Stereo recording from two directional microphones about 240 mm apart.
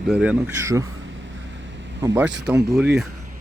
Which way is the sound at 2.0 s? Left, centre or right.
Centre.